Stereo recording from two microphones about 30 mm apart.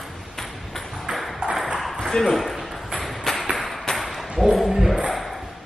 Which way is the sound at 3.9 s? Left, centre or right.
Centre.